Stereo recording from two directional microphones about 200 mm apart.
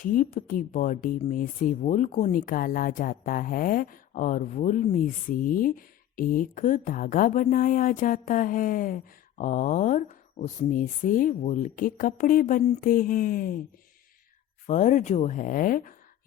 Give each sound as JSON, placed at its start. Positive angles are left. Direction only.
{"t": 0.0, "sound": "speech", "side_deg": 45}
{"t": 14.7, "sound": "speech", "side_deg": 40}